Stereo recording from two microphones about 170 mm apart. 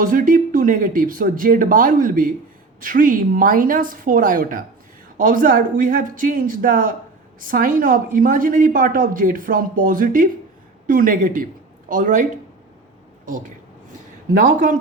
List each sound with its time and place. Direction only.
0.0 s a woman's voice: 50° right (ahead or behind)